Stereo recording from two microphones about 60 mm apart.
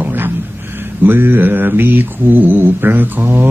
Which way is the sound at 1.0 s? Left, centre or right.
Right.